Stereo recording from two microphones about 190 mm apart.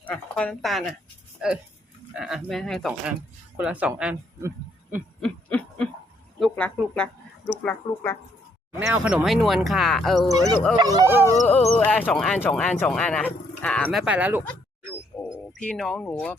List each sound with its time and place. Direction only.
0.0 s speech: 5° left (ahead or behind)
2.1 s speech: centre (ahead or behind)
5.2 s snicker: 5° left (ahead or behind)
6.4 s speech: 5° left (ahead or behind)
8.9 s speech: 5° right (ahead or behind)
10.8 s speech: 20° right (ahead or behind)
11.4 s speech: 5° left (ahead or behind)
14.0 s speech: 5° right (ahead or behind)
15.2 s speech: 5° left (ahead or behind)